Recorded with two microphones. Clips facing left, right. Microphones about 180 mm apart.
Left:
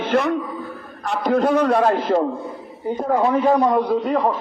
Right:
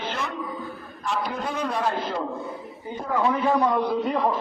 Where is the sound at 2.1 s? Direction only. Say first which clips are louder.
Left 11 dB; 70° left (ahead or behind).